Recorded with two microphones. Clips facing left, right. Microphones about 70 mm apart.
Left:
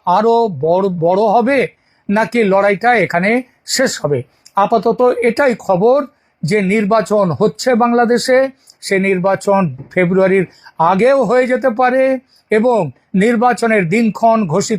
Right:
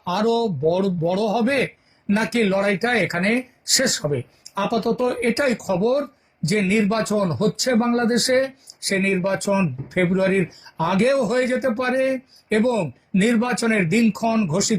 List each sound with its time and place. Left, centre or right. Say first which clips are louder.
0.0 s a man's voice: left 9 dB; left